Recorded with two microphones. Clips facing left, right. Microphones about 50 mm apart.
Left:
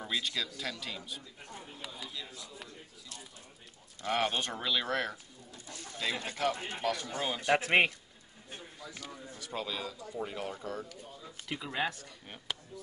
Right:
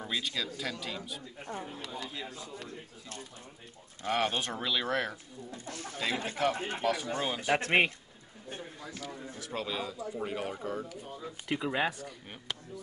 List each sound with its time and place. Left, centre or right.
0.0 s speech: centre
1.5 s speech: right
2.1 s speech: right
4.0 s speech: right
4.4 s speech: centre
5.7 s speech: right
6.2 s speech: centre
6.5 s speech: right
6.8 s speech: centre
7.4 s speech: centre
9.4 s speech: centre
11.4 s speech: centre